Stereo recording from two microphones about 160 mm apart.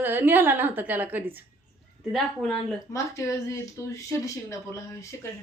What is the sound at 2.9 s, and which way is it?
Speech, 20° left (ahead or behind).